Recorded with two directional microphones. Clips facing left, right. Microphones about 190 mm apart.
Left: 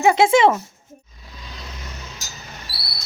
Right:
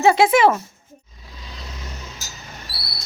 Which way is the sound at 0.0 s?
20° left (ahead or behind).